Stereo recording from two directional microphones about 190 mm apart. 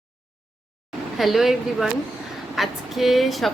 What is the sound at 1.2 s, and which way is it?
A woman's voice, centre (ahead or behind).